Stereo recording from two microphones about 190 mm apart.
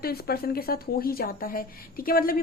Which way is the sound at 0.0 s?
55° left (ahead or behind).